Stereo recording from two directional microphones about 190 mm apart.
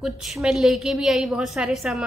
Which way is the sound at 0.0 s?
Centre (ahead or behind).